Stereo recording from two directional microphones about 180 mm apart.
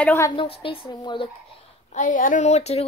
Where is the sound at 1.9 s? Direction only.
45° left (ahead or behind).